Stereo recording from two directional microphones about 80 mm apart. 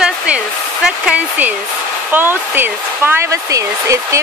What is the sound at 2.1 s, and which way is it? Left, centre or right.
Speech, right.